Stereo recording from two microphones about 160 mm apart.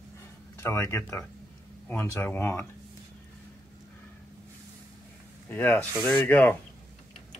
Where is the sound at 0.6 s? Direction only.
15° left (ahead or behind).